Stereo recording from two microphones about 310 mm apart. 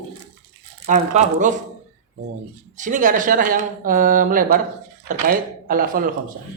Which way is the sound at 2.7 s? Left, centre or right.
Right.